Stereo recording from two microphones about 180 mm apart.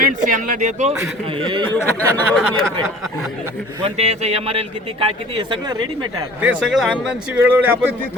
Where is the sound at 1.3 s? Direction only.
30° right (ahead or behind).